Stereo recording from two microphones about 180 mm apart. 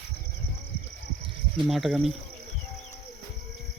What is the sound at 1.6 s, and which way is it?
Speech, centre (ahead or behind).